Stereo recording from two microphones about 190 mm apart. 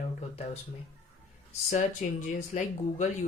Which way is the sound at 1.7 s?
40° left (ahead or behind).